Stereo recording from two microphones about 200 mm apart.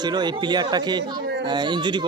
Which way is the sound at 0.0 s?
20° right (ahead or behind).